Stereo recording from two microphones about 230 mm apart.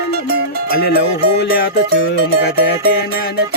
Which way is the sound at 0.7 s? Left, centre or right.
Left.